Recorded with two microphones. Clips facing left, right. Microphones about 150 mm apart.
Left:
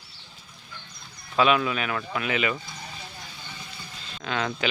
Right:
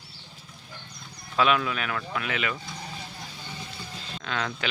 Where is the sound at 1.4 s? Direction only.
5° left (ahead or behind).